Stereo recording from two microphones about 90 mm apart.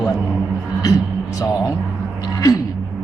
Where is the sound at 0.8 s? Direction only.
40° left (ahead or behind).